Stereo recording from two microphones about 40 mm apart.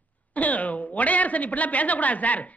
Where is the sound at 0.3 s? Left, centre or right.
Left.